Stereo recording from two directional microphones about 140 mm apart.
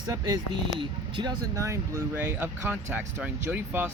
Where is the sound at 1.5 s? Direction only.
20° right (ahead or behind).